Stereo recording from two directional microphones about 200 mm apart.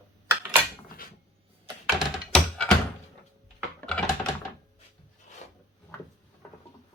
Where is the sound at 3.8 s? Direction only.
5° left (ahead or behind).